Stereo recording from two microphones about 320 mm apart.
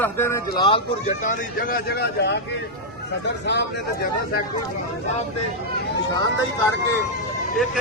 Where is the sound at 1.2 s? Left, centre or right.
Left.